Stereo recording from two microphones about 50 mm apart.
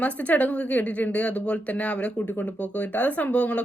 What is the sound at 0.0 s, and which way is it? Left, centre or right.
Speech, left.